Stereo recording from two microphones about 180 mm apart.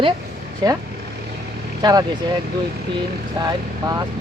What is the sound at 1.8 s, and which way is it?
Speech, 20° right (ahead or behind).